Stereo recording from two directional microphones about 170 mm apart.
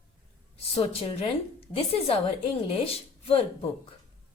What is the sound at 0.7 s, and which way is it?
Speech, 35° left (ahead or behind).